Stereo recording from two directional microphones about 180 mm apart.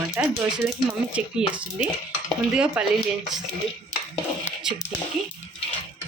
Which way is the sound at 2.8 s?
5° right (ahead or behind).